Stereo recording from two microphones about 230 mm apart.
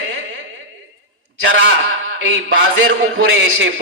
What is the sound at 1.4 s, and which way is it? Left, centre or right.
A man's voice, right.